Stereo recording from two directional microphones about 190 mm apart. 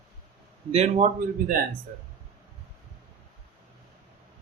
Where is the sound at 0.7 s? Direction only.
35° right (ahead or behind).